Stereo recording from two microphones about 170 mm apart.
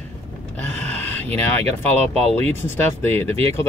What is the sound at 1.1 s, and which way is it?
Speech, 10° left (ahead or behind).